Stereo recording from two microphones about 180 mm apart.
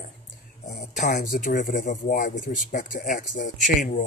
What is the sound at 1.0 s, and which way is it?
Speech, 45° left (ahead or behind).